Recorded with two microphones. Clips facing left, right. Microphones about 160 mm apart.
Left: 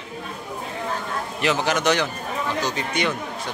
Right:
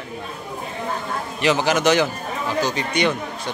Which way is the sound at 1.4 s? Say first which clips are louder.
Right 3 dB; centre (ahead or behind).